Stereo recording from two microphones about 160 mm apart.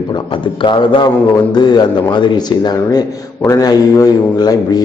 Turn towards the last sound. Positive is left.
turn(degrees=25)  # may be behind; listen again after turning